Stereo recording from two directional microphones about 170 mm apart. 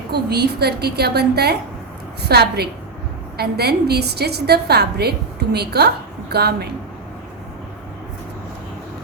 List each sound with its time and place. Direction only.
0.1 s a woman's voice: 70° right (ahead or behind)